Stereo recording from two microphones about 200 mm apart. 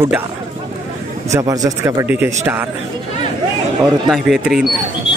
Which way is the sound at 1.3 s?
15° right (ahead or behind).